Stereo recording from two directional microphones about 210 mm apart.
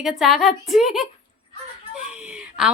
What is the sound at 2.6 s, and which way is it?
Speech, 5° right (ahead or behind).